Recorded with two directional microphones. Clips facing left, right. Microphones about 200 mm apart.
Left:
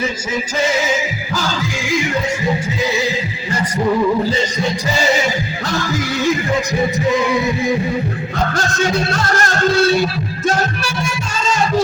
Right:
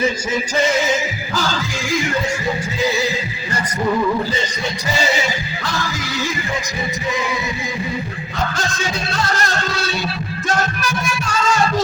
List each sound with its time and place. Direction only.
9.3 s music: 50° left (ahead or behind)